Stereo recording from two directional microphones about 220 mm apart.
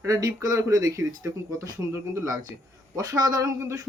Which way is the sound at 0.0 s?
15° right (ahead or behind).